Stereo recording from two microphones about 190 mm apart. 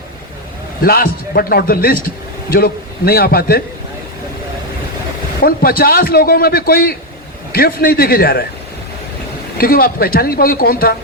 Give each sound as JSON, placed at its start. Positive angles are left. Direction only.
{"t": 0.8, "sound": "a man's voice", "side_deg": 50}
{"t": 5.4, "sound": "a man's voice", "side_deg": 50}
{"t": 9.6, "sound": "a man's voice", "side_deg": 50}